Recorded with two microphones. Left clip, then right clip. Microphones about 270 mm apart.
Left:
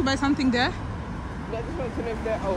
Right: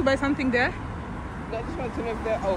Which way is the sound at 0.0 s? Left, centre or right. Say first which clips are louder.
Even; centre.